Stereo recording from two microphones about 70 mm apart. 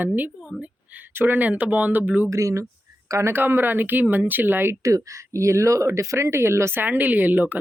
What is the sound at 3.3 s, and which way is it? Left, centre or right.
Speech, right.